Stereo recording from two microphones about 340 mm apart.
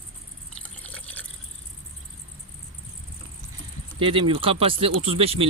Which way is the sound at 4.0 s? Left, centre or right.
Centre.